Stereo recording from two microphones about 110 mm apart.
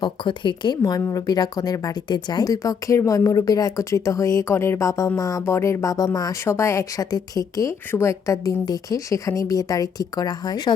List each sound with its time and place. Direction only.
0.0 s a woman's voice: 45° left (ahead or behind)
0.8 s speech: 30° left (ahead or behind)